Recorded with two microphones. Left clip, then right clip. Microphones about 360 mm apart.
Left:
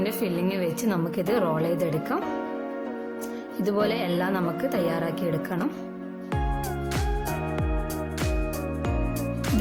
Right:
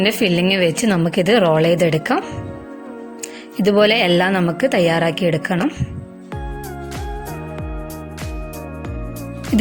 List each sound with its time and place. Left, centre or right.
0.0 s a woman's voice: right
3.7 s a woman's voice: right